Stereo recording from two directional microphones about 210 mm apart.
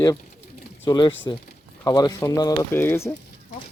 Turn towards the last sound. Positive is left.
turn(degrees=10)  # may be behind; listen again after turning